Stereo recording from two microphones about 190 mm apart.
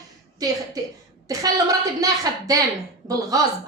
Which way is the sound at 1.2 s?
20° right (ahead or behind).